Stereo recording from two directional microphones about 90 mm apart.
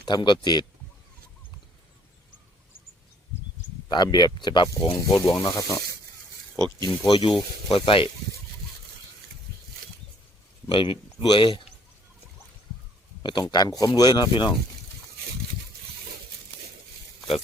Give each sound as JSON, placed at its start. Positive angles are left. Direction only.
{"t": 0.0, "sound": "speech", "side_deg": 55}
{"t": 3.8, "sound": "speech", "side_deg": 50}
{"t": 5.4, "sound": "speech", "side_deg": 40}
{"t": 7.1, "sound": "speech", "side_deg": 65}
{"t": 10.7, "sound": "speech", "side_deg": 70}
{"t": 13.2, "sound": "speech", "side_deg": 55}